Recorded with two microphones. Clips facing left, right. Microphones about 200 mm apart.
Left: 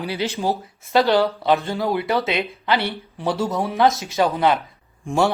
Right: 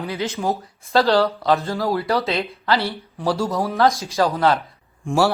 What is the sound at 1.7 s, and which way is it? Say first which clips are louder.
Speech: even; centre (ahead or behind).